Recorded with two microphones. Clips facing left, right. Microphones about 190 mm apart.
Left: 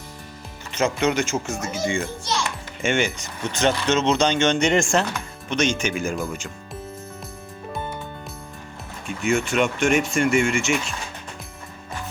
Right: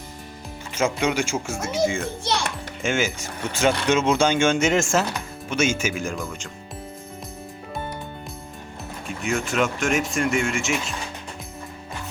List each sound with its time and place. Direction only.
0.7 s speech: 10° right (ahead or behind)
2.2 s music: 60° right (ahead or behind)
2.8 s speech: centre (ahead or behind)
9.0 s speech: centre (ahead or behind)